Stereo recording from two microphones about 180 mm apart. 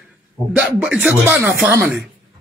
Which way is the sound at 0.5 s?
5° right (ahead or behind).